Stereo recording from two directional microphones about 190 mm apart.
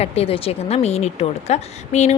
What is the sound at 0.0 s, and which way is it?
Speech, 35° left (ahead or behind).